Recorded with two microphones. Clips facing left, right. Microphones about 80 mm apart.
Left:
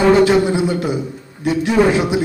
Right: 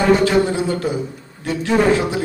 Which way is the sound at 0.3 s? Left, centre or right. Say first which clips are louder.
Left 2 dB; centre.